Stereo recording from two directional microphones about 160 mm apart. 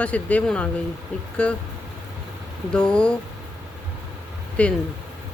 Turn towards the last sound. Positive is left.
turn(degrees=10)  # may be behind; listen again after turning